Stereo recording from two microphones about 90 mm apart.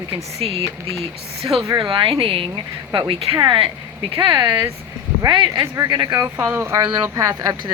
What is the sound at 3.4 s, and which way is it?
Speech, 70° right (ahead or behind).